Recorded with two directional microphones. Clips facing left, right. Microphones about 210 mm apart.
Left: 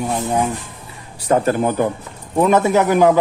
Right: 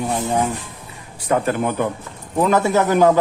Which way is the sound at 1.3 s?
35° left (ahead or behind).